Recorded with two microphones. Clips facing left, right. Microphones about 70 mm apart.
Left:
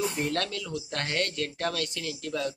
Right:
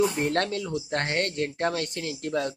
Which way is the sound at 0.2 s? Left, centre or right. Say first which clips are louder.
Right 4 dB; right.